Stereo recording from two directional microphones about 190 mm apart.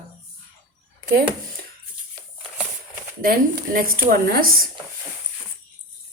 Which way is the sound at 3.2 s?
50° right (ahead or behind).